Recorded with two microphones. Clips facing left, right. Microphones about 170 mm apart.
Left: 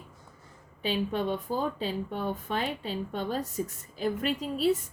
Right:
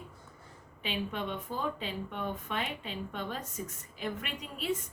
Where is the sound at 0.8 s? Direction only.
35° left (ahead or behind).